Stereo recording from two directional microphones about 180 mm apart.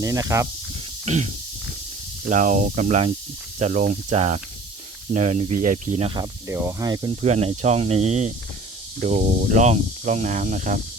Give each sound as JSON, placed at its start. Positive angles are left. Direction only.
{"t": 0.0, "sound": "speech", "side_deg": -15}
{"t": 1.0, "sound": "speech", "side_deg": -40}
{"t": 2.3, "sound": "speech", "side_deg": -45}
{"t": 6.1, "sound": "speech", "side_deg": -15}
{"t": 7.2, "sound": "speech", "side_deg": -40}